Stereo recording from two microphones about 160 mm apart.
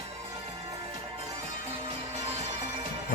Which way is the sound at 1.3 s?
40° right (ahead or behind).